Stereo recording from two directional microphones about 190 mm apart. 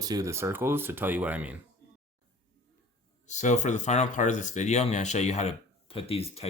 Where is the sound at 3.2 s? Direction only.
40° left (ahead or behind).